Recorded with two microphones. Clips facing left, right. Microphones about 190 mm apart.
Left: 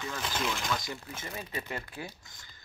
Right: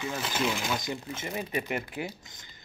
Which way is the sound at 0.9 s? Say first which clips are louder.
Right 6 dB; 20° right (ahead or behind).